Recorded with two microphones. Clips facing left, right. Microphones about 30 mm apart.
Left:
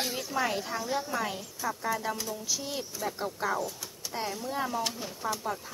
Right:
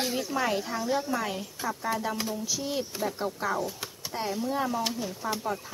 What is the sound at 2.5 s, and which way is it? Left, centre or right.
Speech, centre.